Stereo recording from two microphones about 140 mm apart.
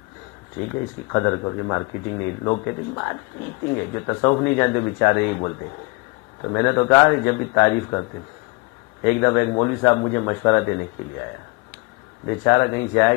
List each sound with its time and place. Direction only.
1.1 s speech: 25° left (ahead or behind)
9.0 s speech: 20° left (ahead or behind)
12.3 s speech: 25° left (ahead or behind)